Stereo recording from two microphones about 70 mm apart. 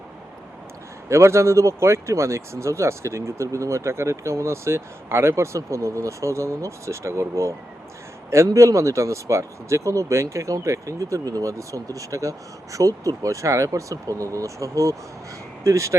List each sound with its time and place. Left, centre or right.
1.0 s speech: right